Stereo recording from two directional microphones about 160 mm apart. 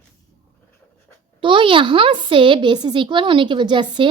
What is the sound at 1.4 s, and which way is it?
A woman's voice, 30° right (ahead or behind).